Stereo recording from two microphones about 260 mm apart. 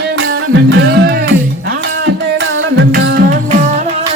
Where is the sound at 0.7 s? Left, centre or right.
Right.